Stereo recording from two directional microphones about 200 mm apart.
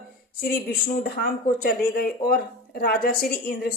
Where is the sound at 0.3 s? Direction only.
50° left (ahead or behind).